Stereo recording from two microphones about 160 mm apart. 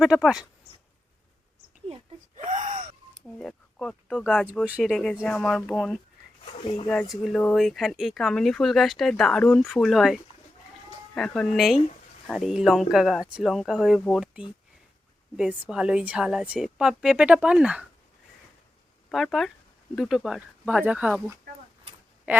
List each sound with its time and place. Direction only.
0.0 s speech: 5° right (ahead or behind)
2.5 s wheeze: 55° right (ahead or behind)
3.2 s speech: 5° left (ahead or behind)
19.1 s speech: centre (ahead or behind)
22.3 s a woman's voice: 10° right (ahead or behind)